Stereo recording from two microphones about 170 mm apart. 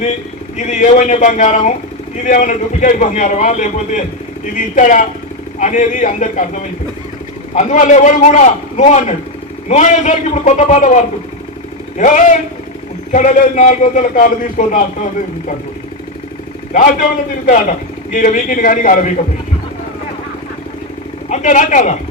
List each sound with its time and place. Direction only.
0.5 s a man's voice: 45° left (ahead or behind)
16.7 s a man's voice: 55° left (ahead or behind)
21.2 s a man's voice: 45° left (ahead or behind)